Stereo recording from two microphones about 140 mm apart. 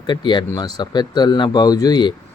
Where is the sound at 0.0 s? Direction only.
30° left (ahead or behind).